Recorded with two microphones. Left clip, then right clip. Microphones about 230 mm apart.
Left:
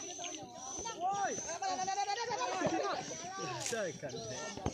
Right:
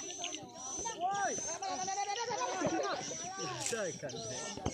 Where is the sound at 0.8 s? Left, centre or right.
Left.